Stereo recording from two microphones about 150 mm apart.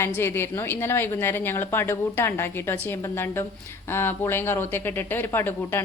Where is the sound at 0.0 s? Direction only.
15° left (ahead or behind).